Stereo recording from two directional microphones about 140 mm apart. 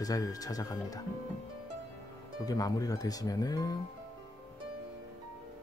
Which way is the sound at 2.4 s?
25° left (ahead or behind).